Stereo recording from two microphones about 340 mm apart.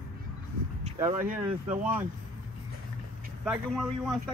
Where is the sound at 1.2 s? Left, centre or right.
Right.